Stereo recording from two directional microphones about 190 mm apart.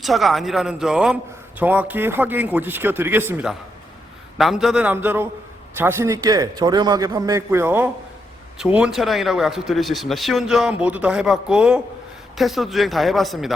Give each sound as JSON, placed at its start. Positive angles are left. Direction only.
{"t": 0.0, "sound": "a man's voice", "side_deg": 0}